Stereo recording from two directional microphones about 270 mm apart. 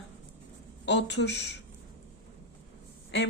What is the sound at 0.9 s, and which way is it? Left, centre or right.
Speech, left.